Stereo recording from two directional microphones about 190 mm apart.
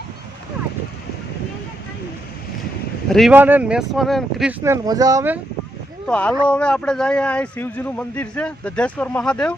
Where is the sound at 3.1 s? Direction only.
Centre (ahead or behind).